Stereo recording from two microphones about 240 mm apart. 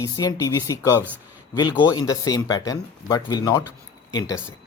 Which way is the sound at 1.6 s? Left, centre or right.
Centre.